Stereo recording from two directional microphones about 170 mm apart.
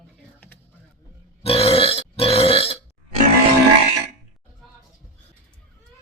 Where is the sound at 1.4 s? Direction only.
35° left (ahead or behind).